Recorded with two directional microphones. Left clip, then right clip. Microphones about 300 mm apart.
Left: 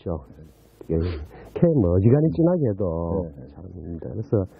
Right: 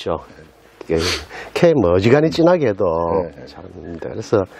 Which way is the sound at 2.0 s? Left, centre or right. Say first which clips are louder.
Right 7 dB; centre.